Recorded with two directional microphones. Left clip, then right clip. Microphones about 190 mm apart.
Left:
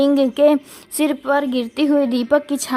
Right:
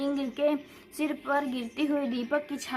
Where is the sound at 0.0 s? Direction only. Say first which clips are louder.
Left 14 dB; 50° left (ahead or behind).